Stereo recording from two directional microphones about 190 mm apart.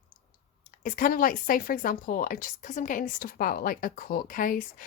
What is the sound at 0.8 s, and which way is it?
Speech, 45° left (ahead or behind).